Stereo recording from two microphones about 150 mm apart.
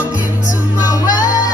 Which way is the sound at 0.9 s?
25° left (ahead or behind).